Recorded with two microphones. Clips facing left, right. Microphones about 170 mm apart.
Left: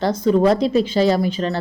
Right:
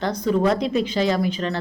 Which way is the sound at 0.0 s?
35° left (ahead or behind).